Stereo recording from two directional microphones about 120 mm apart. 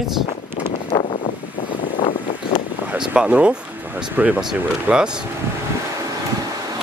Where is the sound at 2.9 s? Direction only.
10° right (ahead or behind).